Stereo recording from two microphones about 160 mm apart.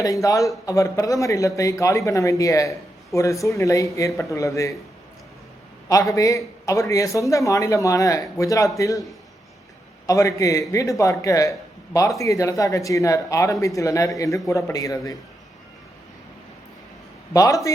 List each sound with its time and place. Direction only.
0.0 s speech: 20° left (ahead or behind)
5.9 s speech: 20° left (ahead or behind)
10.1 s speech: 20° left (ahead or behind)
17.3 s speech: 20° left (ahead or behind)